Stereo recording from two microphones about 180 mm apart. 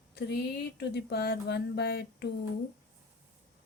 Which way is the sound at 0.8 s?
65° left (ahead or behind).